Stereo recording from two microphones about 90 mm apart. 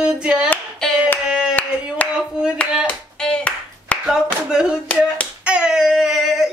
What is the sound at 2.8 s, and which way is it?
Clapping, 10° left (ahead or behind).